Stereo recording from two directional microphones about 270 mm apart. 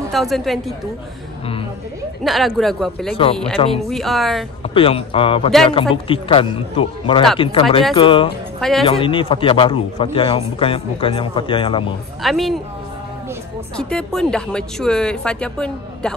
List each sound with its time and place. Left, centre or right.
0.1 s speech: centre
2.2 s speech: centre
3.6 s a man's voice: centre
3.9 s speech: centre
4.7 s a man's voice: left
8.5 s speech: centre
8.8 s a man's voice: centre
12.2 s speech: centre
13.7 s speech: centre